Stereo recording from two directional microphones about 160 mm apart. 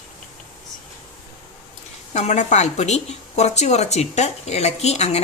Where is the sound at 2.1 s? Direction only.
45° left (ahead or behind).